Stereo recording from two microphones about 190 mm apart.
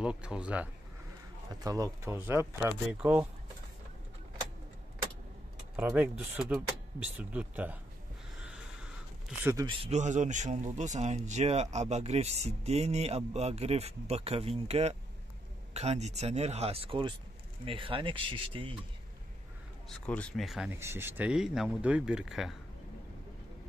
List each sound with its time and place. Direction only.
0.0 s speech: 5° right (ahead or behind)
1.6 s speech: 20° right (ahead or behind)
5.9 s speech: 5° right (ahead or behind)
9.4 s speech: 15° right (ahead or behind)
9.7 s speech: 30° right (ahead or behind)
19.9 s speech: 5° left (ahead or behind)
20.7 s speech: 10° right (ahead or behind)